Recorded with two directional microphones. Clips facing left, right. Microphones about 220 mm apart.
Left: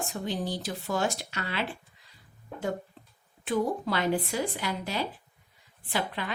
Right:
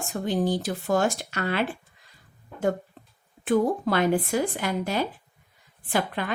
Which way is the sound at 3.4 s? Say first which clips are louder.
Right 6 dB; 50° right (ahead or behind).